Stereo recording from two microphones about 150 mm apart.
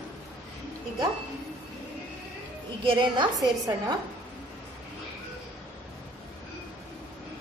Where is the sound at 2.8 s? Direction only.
35° right (ahead or behind).